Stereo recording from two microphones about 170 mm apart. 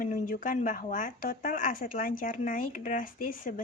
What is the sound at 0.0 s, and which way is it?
Speech, 50° left (ahead or behind).